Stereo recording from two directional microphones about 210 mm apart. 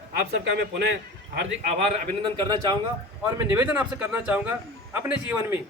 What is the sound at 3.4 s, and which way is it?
A man's voice, 10° right (ahead or behind).